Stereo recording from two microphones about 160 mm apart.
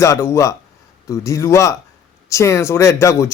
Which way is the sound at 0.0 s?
20° left (ahead or behind).